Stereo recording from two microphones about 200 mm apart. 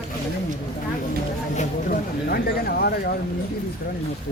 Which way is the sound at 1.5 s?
45° left (ahead or behind).